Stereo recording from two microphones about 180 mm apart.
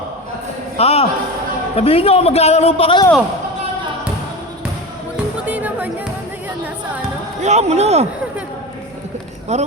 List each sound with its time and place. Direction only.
0.8 s a man's voice: 35° left (ahead or behind)
5.5 s music: 10° right (ahead or behind)
7.4 s speech: 40° right (ahead or behind)
9.5 s speech: 40° right (ahead or behind)